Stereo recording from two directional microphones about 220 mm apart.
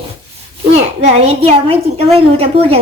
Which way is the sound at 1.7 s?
25° right (ahead or behind).